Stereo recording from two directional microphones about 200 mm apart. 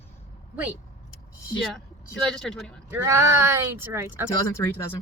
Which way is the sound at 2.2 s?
Centre (ahead or behind).